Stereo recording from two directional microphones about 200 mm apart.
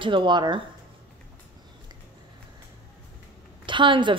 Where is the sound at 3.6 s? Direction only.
25° right (ahead or behind).